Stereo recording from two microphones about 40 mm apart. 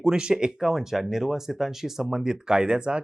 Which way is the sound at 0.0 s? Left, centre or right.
Centre.